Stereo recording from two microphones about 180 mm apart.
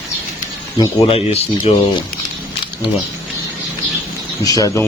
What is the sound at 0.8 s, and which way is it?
Speech, 30° left (ahead or behind).